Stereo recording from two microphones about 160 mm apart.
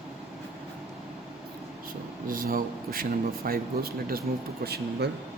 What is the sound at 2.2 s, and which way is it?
Speech, 65° right (ahead or behind).